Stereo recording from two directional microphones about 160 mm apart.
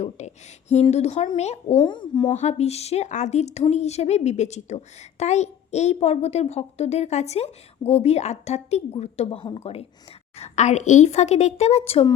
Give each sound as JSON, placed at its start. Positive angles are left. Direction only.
{"t": 0.0, "sound": "a child's voice", "side_deg": 45}
{"t": 1.8, "sound": "speech", "side_deg": 30}
{"t": 2.3, "sound": "a child's voice", "side_deg": 45}